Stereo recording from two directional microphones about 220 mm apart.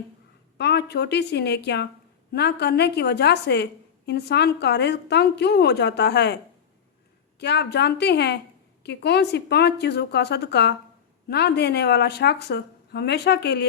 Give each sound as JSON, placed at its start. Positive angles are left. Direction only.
{"t": 0.6, "sound": "a woman's voice", "side_deg": 50}